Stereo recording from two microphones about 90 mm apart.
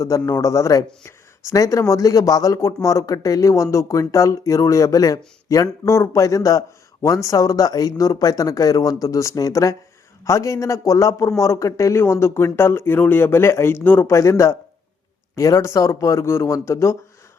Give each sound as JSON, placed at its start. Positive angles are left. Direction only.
{"t": 0.0, "sound": "speech", "side_deg": 40}
{"t": 14.1, "sound": "speech", "side_deg": 35}